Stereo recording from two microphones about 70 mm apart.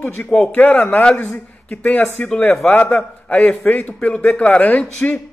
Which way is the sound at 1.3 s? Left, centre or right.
Left.